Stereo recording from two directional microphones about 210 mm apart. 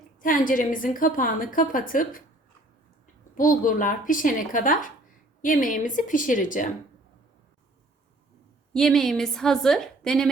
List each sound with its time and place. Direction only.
0.2 s a woman's voice: 40° left (ahead or behind)
3.3 s a woman's voice: 40° left (ahead or behind)
8.7 s a woman's voice: centre (ahead or behind)